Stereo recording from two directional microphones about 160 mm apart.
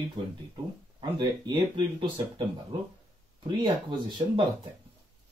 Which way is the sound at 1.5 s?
30° right (ahead or behind).